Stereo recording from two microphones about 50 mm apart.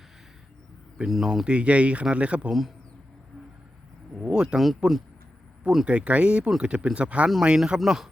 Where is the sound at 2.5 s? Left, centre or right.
Centre.